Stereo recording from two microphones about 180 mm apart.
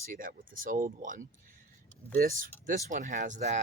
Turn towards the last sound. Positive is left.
turn(degrees=-40)  # may be behind; listen again after turning